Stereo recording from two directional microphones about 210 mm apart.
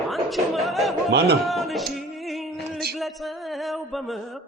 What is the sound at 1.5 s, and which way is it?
Singing, centre (ahead or behind).